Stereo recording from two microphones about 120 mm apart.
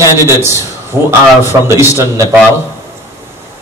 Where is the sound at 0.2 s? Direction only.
20° right (ahead or behind).